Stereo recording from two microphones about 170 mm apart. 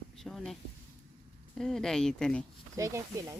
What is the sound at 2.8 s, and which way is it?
Speech, 20° right (ahead or behind).